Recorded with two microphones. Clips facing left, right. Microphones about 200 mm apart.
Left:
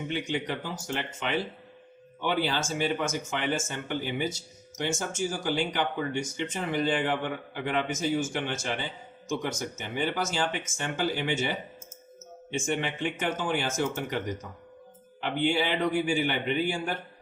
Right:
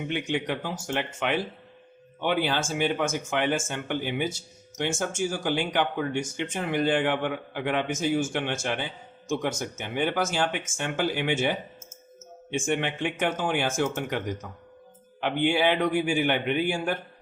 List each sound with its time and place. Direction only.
0.1 s speech: 60° right (ahead or behind)
15.2 s speech: 55° right (ahead or behind)